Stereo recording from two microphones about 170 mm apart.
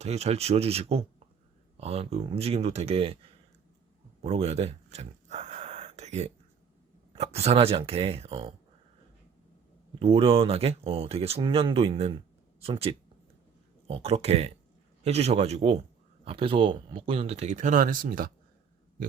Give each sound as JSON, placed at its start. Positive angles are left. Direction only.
{"t": 0.0, "sound": "speech", "side_deg": -40}
{"t": 4.2, "sound": "gasp", "side_deg": -40}
{"t": 7.1, "sound": "speech", "side_deg": -40}
{"t": 10.0, "sound": "speech", "side_deg": -35}